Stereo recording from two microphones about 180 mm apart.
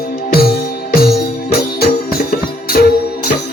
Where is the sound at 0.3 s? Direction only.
60° left (ahead or behind).